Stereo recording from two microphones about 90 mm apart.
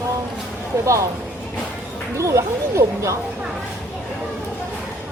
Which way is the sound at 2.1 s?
35° right (ahead or behind).